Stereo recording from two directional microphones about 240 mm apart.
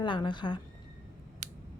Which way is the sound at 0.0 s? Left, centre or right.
Centre.